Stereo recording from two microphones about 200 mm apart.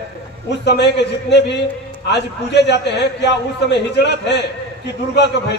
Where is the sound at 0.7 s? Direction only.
55° left (ahead or behind).